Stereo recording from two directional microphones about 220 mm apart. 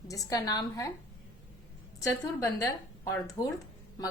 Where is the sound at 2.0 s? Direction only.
15° left (ahead or behind).